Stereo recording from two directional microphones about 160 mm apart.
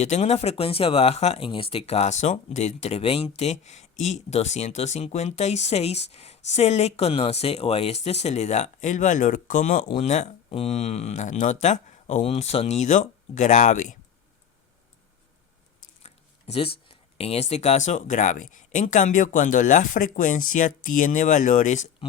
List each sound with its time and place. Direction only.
0.0 s speech: 45° left (ahead or behind)
16.0 s speech: 40° left (ahead or behind)